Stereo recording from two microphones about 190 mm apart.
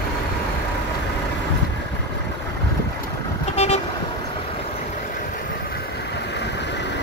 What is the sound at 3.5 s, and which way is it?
Vehicle, 35° left (ahead or behind).